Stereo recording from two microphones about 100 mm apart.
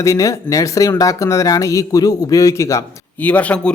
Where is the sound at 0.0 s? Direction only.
35° left (ahead or behind).